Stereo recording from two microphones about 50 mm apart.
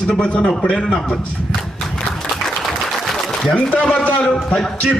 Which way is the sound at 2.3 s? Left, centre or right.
Centre.